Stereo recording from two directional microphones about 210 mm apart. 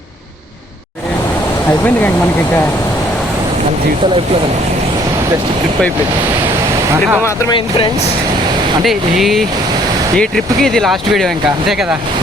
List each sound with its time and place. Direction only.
6.9 s speech: 10° right (ahead or behind)
7.3 s speech: 25° left (ahead or behind)
8.8 s speech: centre (ahead or behind)